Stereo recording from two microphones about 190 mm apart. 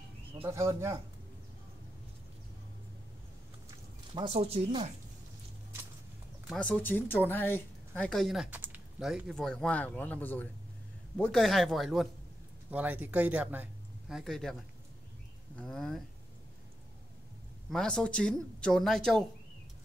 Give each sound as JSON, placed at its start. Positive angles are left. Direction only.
{"t": 0.4, "sound": "speech", "side_deg": -15}
{"t": 4.1, "sound": "speech", "side_deg": -25}
{"t": 6.5, "sound": "speech", "side_deg": 5}
{"t": 17.6, "sound": "speech", "side_deg": 5}